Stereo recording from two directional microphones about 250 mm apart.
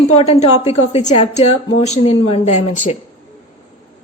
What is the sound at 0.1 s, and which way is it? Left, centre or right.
A woman's voice, left.